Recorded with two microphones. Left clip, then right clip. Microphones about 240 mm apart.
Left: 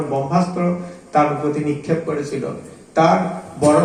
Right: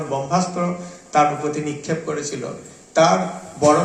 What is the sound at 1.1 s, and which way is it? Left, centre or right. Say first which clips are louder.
A man's voice: left 1 dB; right.